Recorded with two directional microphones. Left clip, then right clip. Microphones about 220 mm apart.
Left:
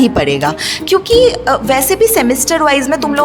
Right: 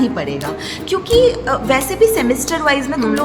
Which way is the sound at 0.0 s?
45° left (ahead or behind).